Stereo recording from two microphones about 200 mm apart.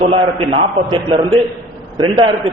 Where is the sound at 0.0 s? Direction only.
30° right (ahead or behind).